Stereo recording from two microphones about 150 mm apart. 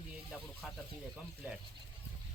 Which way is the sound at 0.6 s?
5° right (ahead or behind).